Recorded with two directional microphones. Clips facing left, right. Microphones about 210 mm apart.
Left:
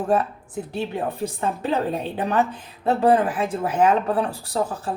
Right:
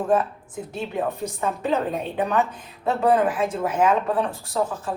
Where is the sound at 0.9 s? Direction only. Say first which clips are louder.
Even; 30° left (ahead or behind).